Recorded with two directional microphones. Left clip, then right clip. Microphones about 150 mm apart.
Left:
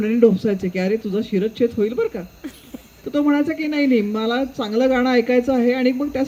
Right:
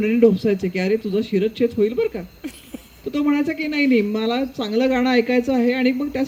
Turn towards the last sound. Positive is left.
turn(degrees=-20)  # may be behind; listen again after turning